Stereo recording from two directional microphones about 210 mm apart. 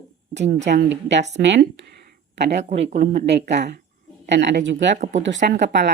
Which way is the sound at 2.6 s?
30° right (ahead or behind).